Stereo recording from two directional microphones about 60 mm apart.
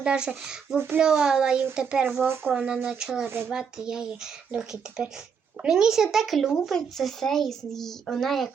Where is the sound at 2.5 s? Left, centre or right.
Centre.